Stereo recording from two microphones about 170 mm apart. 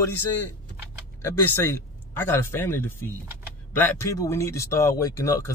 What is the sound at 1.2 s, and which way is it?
Speech, 15° left (ahead or behind).